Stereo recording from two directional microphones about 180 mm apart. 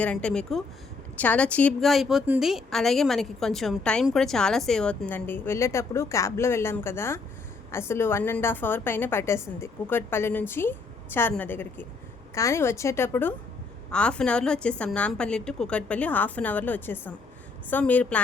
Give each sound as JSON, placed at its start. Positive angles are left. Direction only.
{"t": 0.0, "sound": "a woman's voice", "side_deg": 5}